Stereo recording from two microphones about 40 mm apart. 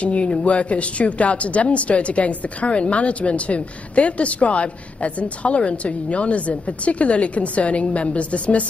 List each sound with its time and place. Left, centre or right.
0.0 s speech: left